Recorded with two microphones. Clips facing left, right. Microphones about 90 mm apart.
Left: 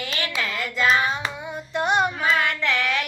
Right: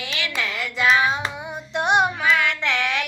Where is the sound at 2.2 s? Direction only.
45° left (ahead or behind).